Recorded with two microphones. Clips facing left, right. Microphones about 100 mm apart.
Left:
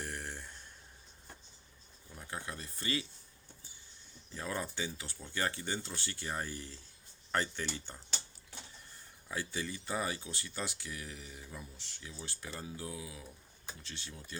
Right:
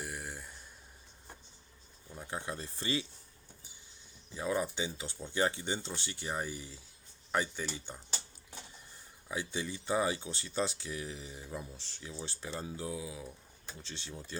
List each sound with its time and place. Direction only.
0.0 s a sound: 5° right (ahead or behind)
2.1 s speech: 20° right (ahead or behind)
4.4 s speech: 15° right (ahead or behind)
9.3 s speech: 20° right (ahead or behind)